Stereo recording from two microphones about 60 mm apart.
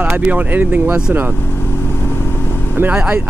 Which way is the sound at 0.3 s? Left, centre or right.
Right.